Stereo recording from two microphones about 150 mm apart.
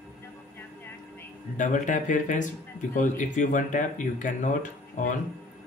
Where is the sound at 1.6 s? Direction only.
55° left (ahead or behind).